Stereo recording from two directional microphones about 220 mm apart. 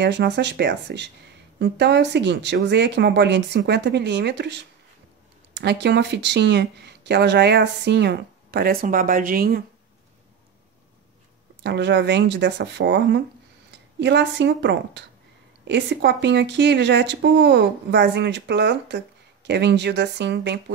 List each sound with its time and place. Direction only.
0.0 s speech: 50° right (ahead or behind)
11.6 s speech: 50° right (ahead or behind)